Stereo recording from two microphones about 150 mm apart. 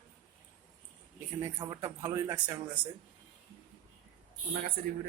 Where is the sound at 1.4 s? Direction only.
20° right (ahead or behind).